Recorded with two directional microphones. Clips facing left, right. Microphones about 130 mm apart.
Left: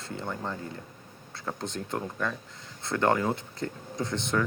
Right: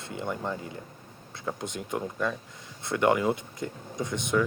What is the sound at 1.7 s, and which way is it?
Speech, 15° right (ahead or behind).